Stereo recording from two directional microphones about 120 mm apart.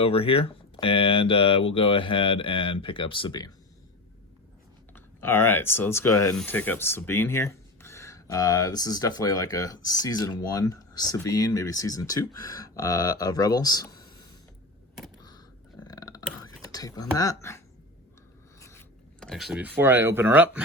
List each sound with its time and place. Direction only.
0.0 s speech: 50° left (ahead or behind)
4.9 s speech: 20° left (ahead or behind)
15.9 s burping: 30° left (ahead or behind)
18.6 s a sound: 20° left (ahead or behind)
19.2 s speech: centre (ahead or behind)
19.6 s speech: 15° right (ahead or behind)